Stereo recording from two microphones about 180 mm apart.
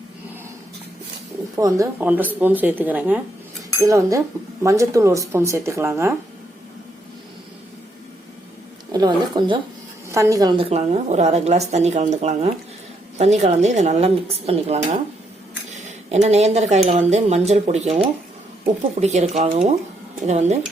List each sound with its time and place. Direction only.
1.5 s speech: 15° right (ahead or behind)
8.9 s a woman's voice: 20° right (ahead or behind)
10.6 s speech: 35° right (ahead or behind)